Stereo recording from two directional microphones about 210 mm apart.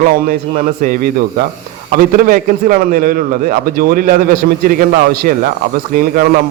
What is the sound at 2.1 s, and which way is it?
A man's voice, 45° right (ahead or behind).